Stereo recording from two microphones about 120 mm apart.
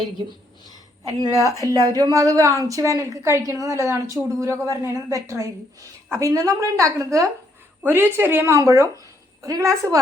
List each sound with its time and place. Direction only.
1.5 s a woman's voice: 30° right (ahead or behind)